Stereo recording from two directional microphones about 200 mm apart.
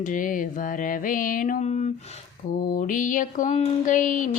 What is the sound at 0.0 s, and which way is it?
Speech, 40° left (ahead or behind).